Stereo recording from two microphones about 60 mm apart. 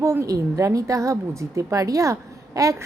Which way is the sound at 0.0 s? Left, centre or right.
Right.